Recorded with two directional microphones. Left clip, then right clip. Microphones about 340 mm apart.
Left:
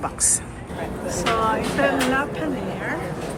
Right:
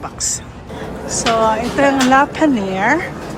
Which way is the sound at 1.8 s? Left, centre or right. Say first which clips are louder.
Right 10 dB; centre.